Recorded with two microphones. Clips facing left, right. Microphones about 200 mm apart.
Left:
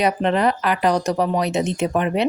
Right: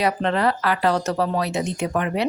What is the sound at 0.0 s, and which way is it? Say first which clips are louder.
Speech: left 2 dB; 20° left (ahead or behind).